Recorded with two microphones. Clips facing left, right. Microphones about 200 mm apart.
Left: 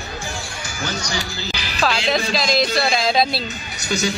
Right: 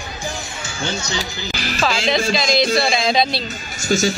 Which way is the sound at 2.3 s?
Centre (ahead or behind).